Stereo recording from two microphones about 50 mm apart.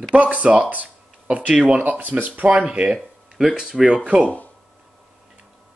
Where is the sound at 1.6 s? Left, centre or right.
Right.